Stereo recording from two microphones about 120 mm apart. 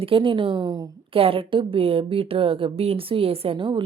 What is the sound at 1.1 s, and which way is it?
A woman's voice, 50° right (ahead or behind).